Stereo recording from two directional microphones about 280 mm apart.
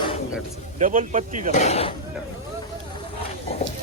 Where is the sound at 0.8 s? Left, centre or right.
Right.